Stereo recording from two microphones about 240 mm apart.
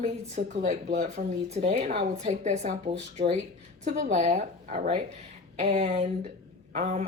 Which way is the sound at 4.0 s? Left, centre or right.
Right.